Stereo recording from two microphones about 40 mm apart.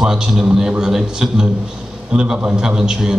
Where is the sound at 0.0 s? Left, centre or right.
Centre.